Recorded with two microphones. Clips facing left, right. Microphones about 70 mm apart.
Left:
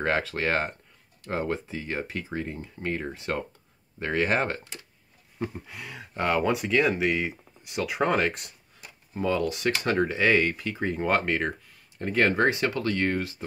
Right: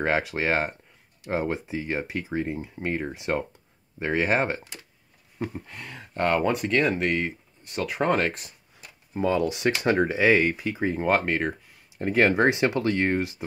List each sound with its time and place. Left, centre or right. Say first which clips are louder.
0.0 s speech: right 2 dB; centre
5.7 s speech: even; centre
9.1 s speech: right 2 dB; right
10.1 s speech: right 2 dB; centre
12.0 s speech: right 2 dB; centre